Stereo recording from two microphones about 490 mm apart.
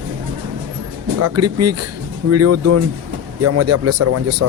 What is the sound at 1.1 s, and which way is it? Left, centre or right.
Speech, right.